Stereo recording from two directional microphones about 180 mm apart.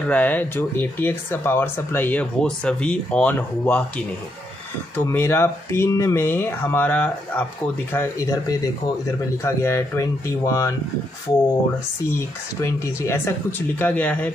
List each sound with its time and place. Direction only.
0.1 s speech: 10° left (ahead or behind)
4.9 s speech: 10° left (ahead or behind)
12.6 s speech: 15° left (ahead or behind)